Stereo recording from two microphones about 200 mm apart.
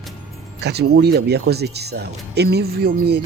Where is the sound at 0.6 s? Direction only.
55° right (ahead or behind).